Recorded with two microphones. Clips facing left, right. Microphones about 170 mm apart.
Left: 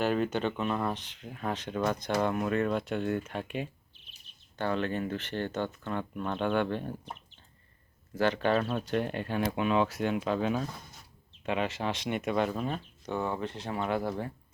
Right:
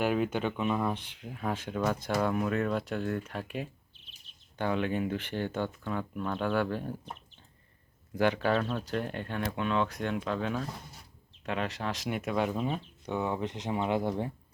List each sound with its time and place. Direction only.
0.0 s speech: 10° right (ahead or behind)
4.5 s speech: 10° right (ahead or behind)
8.1 s a man's voice: 15° right (ahead or behind)
8.4 s speech: centre (ahead or behind); by 14.3 s 20° right (ahead or behind)